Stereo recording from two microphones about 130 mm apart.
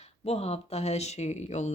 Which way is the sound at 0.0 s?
55° left (ahead or behind).